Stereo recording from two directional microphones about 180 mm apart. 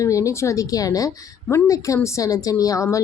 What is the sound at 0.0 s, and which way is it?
A woman's voice, 15° left (ahead or behind).